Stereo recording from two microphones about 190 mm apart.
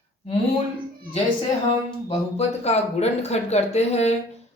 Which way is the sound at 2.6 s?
35° left (ahead or behind).